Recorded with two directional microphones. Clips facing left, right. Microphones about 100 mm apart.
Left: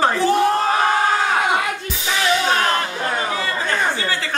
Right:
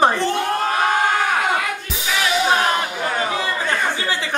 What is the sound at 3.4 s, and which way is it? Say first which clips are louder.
Chatter: even; 20° right (ahead or behind).